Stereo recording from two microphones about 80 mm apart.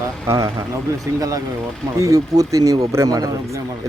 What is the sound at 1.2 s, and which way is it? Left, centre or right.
A man's voice, right.